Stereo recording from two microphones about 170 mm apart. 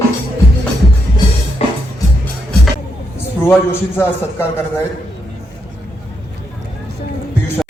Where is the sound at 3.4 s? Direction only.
15° left (ahead or behind).